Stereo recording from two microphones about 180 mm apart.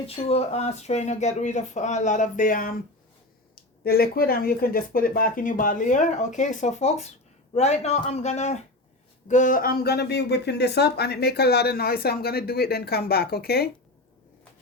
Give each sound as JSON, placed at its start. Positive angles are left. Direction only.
{"t": 0.3, "sound": "speech", "side_deg": 35}